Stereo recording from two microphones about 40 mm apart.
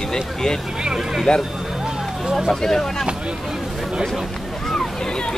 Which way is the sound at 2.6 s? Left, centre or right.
Centre.